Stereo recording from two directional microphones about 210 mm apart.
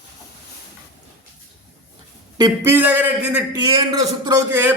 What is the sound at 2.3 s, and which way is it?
A man's voice, 15° right (ahead or behind).